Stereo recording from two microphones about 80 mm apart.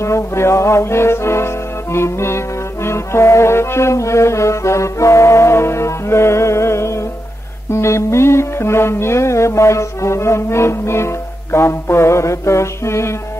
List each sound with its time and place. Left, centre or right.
0.0 s music: left